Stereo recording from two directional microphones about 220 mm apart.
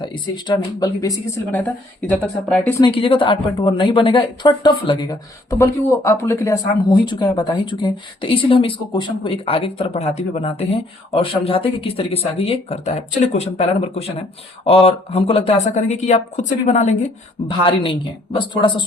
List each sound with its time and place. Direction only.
0.0 s speech: 20° left (ahead or behind)
1.5 s speech: 5° left (ahead or behind)
2.8 s a woman's voice: 20° left (ahead or behind)
18.3 s a woman's voice: 20° left (ahead or behind)